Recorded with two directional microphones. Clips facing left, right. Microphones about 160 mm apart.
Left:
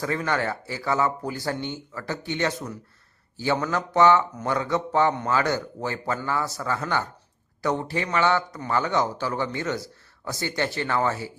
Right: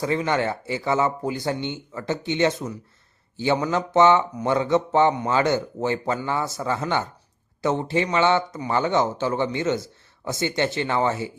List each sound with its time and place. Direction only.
0.0 s speech: 20° right (ahead or behind)